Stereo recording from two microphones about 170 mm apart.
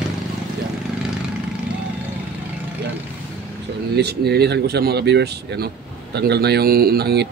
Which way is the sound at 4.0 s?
75° right (ahead or behind).